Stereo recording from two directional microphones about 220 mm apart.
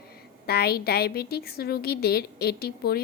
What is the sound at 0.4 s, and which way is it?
A woman's voice, 45° left (ahead or behind).